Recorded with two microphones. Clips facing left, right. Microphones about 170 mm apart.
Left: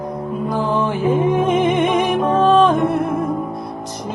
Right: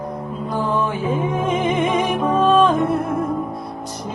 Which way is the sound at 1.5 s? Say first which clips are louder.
Left 4 dB; 75° left (ahead or behind).